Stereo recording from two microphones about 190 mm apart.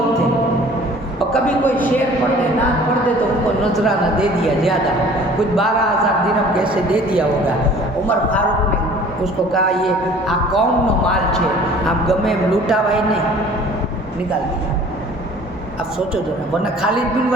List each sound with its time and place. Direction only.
1.3 s a sound: 5° left (ahead or behind)
3.6 s a man's voice: centre (ahead or behind)
6.6 s a man's voice: 5° right (ahead or behind)
9.2 s a man's voice: centre (ahead or behind)